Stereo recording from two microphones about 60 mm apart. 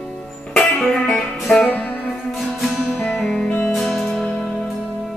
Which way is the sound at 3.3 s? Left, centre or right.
Left.